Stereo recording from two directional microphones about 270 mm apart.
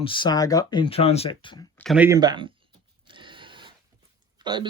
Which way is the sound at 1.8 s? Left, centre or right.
Centre.